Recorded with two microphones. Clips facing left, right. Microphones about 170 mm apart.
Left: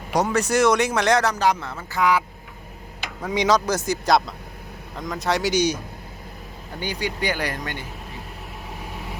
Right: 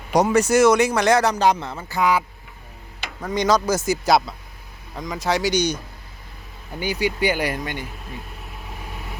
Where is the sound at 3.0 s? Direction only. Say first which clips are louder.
Even; 5° left (ahead or behind).